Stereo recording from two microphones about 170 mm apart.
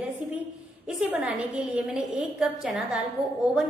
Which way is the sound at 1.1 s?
10° right (ahead or behind).